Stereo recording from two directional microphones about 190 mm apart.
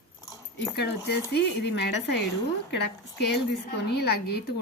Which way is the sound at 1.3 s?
65° left (ahead or behind).